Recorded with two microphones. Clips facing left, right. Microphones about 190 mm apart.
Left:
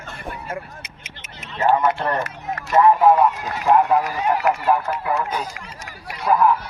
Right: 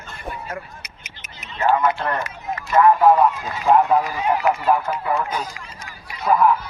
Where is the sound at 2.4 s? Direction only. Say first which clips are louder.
Even; 65° left (ahead or behind).